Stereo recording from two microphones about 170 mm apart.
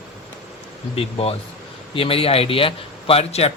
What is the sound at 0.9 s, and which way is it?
Speech, 35° left (ahead or behind).